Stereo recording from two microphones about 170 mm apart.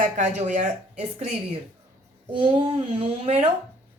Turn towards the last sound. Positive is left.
turn(degrees=-35)  # may be behind; listen again after turning